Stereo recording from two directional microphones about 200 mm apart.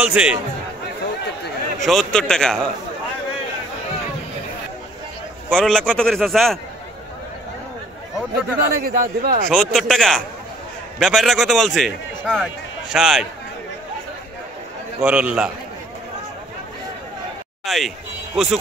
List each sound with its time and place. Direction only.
0.0 s a man's voice: 5° right (ahead or behind)
1.8 s a man's voice: centre (ahead or behind)
5.5 s a man's voice: 5° left (ahead or behind)
8.7 s a man's voice: 45° right (ahead or behind)
9.5 s a man's voice: centre (ahead or behind)
15.0 s a man's voice: 5° right (ahead or behind)
17.6 s a man's voice: centre (ahead or behind)